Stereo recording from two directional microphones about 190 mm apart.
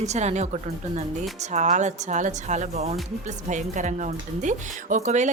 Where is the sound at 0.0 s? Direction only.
35° right (ahead or behind).